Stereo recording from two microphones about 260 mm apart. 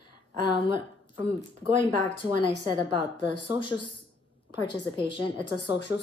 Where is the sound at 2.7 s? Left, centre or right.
Centre.